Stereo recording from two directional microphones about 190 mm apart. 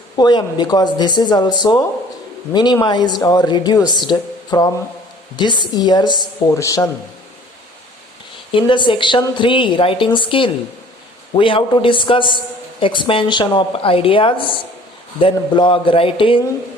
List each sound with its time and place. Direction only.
0.2 s a woman's voice: 20° left (ahead or behind)
8.5 s a woman's voice: 25° left (ahead or behind)